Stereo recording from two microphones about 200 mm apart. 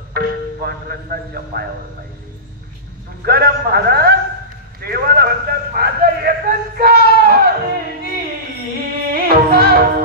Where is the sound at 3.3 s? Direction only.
50° right (ahead or behind).